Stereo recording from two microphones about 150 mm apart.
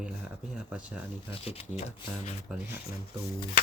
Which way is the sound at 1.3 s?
40° left (ahead or behind).